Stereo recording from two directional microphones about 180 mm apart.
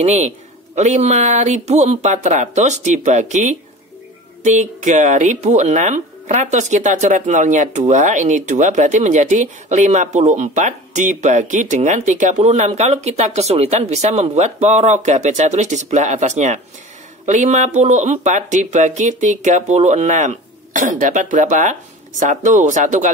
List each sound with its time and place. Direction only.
0.0 s speech: 40° right (ahead or behind)